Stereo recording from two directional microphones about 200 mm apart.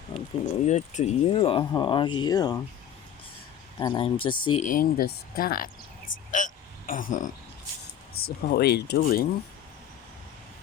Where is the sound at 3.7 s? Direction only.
20° left (ahead or behind).